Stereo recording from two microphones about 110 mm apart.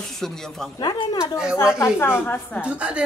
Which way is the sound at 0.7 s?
40° left (ahead or behind).